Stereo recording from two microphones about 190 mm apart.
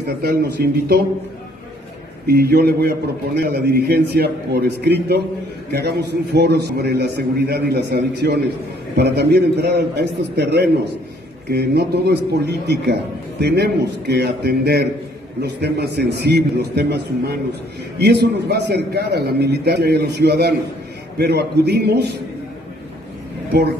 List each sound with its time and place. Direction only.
0.2 s a man's voice: 55° right (ahead or behind)
2.2 s a man's voice: 55° right (ahead or behind)